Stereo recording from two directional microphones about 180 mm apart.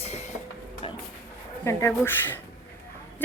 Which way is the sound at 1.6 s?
15° left (ahead or behind).